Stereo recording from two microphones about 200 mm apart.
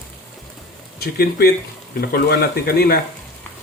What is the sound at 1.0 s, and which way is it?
Speech, 50° left (ahead or behind).